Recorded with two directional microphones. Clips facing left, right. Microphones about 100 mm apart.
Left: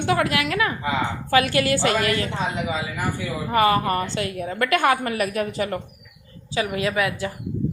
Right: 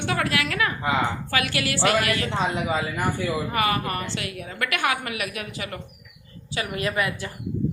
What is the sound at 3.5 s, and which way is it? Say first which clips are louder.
A woman's voice: left 10 dB; 30° left (ahead or behind).